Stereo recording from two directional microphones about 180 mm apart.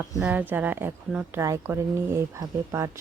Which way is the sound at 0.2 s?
5° right (ahead or behind).